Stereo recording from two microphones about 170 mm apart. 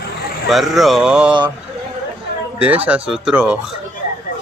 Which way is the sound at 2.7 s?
10° right (ahead or behind).